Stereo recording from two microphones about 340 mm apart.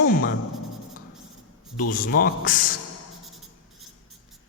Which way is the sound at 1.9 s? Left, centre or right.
Left.